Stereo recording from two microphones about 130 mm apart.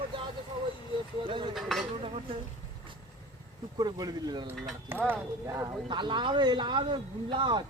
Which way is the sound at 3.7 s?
30° right (ahead or behind).